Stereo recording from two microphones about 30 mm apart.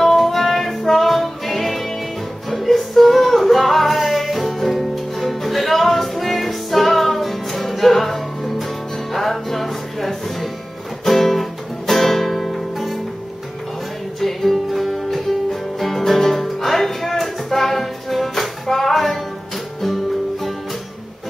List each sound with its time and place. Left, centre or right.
0.0 s music: centre
12.7 s music: centre
14.2 s music: centre